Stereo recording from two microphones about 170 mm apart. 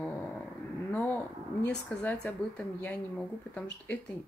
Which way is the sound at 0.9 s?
10° left (ahead or behind).